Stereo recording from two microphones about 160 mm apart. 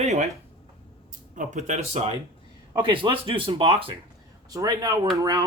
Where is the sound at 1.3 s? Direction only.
50° right (ahead or behind).